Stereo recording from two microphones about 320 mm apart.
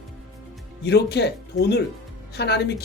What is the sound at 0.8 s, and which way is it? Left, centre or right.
Speech, left.